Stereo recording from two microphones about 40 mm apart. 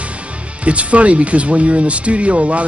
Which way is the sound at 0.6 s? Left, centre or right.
Right.